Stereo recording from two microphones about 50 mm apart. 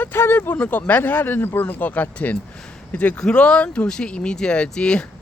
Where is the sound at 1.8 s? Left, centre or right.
Left.